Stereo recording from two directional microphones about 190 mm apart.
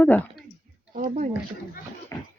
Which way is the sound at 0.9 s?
45° right (ahead or behind).